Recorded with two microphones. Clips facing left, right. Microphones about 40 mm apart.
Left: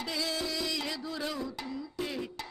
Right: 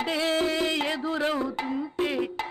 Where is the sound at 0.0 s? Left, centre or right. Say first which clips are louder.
Right 9 dB; right.